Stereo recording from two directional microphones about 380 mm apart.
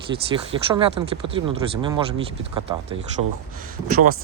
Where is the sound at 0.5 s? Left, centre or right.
Centre.